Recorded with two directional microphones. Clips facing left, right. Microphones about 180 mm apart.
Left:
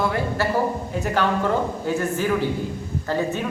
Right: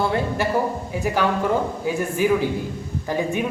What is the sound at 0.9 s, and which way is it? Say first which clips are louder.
A man's voice: right 1 dB; 10° right (ahead or behind).